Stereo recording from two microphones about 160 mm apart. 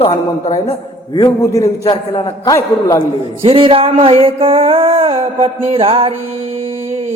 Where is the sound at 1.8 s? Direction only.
30° left (ahead or behind).